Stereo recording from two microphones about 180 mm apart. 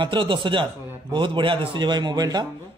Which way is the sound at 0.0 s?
25° right (ahead or behind).